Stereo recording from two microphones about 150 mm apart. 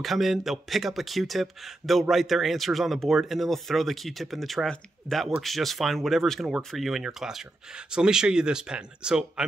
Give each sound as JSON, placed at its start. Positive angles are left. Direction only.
{"t": 0.0, "sound": "speech", "side_deg": 0}